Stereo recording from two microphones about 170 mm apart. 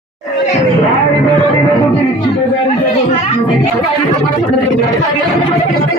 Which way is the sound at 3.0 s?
30° left (ahead or behind).